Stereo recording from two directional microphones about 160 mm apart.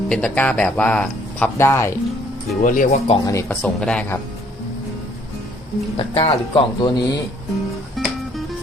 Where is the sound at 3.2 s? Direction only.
20° left (ahead or behind).